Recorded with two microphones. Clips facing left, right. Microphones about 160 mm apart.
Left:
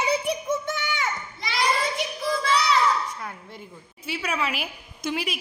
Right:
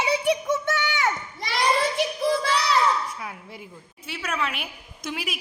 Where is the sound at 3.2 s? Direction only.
5° right (ahead or behind).